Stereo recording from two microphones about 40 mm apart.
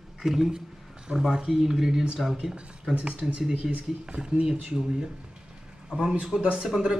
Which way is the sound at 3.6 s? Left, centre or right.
Centre.